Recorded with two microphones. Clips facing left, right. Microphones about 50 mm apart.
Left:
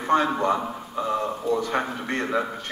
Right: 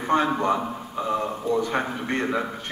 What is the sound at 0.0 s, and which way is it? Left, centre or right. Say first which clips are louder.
A man's voice: even; centre.